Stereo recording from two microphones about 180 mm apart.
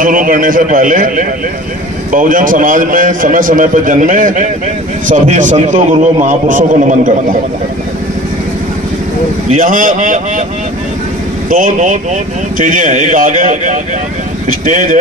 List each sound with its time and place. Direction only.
0.0 s a man's voice: 50° right (ahead or behind)
9.5 s a man's voice: 50° right (ahead or behind)
11.5 s a man's voice: 45° right (ahead or behind)